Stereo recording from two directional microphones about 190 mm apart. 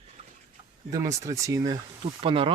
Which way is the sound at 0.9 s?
15° right (ahead or behind).